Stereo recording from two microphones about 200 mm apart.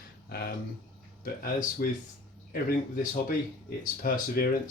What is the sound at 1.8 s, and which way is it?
Speech, 50° left (ahead or behind).